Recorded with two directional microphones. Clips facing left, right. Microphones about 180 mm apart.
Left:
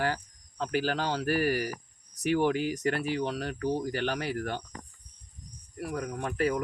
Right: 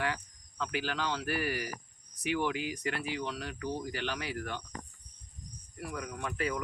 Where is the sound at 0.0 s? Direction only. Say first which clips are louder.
Left 4 dB; 40° left (ahead or behind).